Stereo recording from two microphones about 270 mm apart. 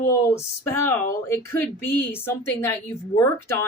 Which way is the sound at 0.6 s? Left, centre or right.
Centre.